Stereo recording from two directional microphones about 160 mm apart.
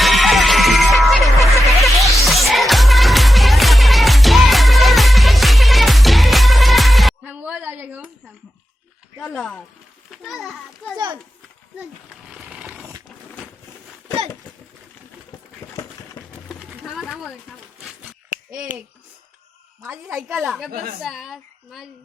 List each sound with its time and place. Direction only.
0.0 s music: centre (ahead or behind)
9.1 s a child's voice: centre (ahead or behind)
10.9 s a child's voice: 30° right (ahead or behind)
12.3 s a sound: 5° right (ahead or behind)
15.6 s a sound: 20° left (ahead or behind)
16.5 s pigeon: 5° right (ahead or behind)
18.3 s babbling: 60° right (ahead or behind)
20.1 s a woman's voice: centre (ahead or behind)